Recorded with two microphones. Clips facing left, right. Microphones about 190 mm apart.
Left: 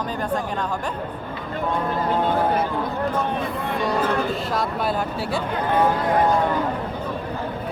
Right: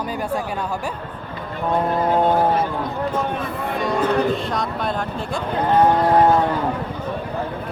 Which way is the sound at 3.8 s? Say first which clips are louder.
Right 3 dB; centre (ahead or behind).